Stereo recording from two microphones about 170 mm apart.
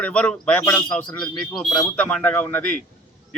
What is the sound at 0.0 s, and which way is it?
Speech, 5° left (ahead or behind).